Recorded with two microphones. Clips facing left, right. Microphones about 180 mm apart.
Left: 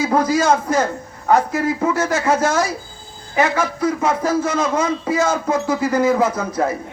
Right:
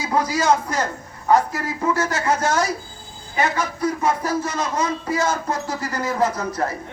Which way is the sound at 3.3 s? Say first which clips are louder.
Left 4 dB; 50° left (ahead or behind).